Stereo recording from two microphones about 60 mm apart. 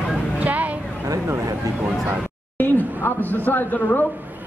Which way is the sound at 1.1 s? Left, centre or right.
Right.